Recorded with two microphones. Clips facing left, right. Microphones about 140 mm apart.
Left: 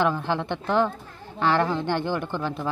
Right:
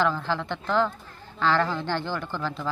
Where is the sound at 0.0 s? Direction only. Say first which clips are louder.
Left 2 dB; 20° left (ahead or behind).